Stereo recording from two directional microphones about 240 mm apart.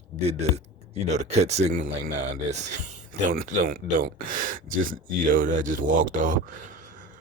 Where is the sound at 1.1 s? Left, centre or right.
Right.